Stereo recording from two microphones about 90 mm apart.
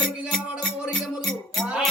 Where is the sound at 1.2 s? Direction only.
5° left (ahead or behind).